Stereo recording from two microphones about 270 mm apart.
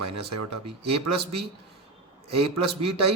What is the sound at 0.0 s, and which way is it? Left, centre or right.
Speech, right.